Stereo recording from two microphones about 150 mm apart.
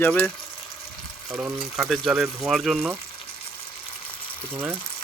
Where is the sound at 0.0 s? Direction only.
10° left (ahead or behind).